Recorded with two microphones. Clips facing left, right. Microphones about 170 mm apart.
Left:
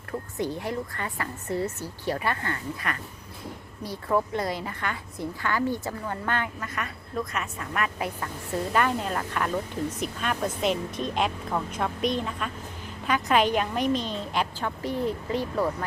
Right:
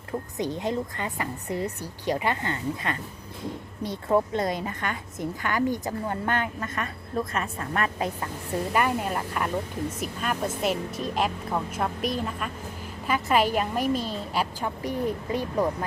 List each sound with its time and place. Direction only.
0.3 s a woman's voice: 20° right (ahead or behind)
8.7 s a woman's voice: 10° right (ahead or behind)